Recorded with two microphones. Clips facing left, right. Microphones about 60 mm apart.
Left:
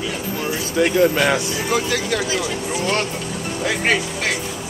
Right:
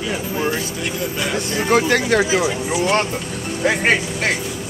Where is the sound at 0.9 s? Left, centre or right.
Left.